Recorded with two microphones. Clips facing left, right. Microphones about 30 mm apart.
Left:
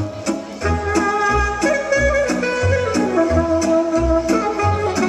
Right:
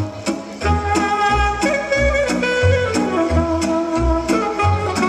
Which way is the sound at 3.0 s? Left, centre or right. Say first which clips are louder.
Left 2 dB; right.